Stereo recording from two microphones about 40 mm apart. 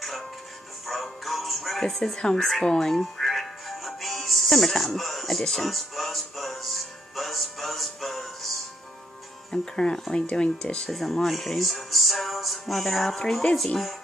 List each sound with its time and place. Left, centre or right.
0.8 s music: centre
2.1 s speech: centre
3.0 s music: centre
9.5 s speech: centre
10.9 s speech: centre